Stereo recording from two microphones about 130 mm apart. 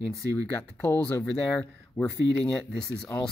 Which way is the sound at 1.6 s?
5° left (ahead or behind).